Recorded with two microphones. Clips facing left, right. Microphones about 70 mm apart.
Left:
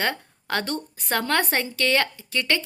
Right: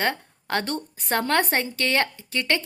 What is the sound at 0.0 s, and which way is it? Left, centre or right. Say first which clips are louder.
A woman's voice: right 1 dB; right.